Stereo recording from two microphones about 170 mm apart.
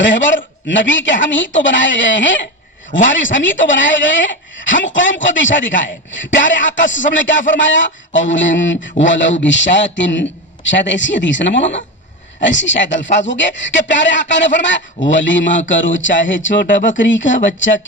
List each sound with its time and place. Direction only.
0.0 s a woman's voice: 90° left